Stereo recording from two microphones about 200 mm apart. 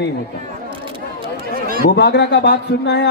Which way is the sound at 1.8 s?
55° left (ahead or behind).